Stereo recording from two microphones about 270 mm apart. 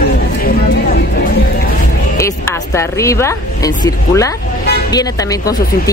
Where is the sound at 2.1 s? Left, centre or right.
Centre.